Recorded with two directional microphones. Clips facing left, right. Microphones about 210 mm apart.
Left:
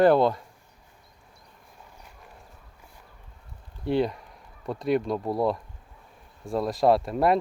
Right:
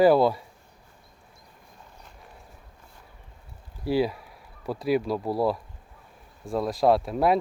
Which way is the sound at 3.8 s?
5° right (ahead or behind).